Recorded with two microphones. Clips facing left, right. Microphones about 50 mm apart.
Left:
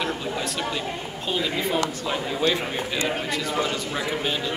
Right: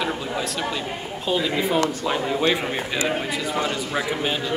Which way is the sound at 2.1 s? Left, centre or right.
Centre.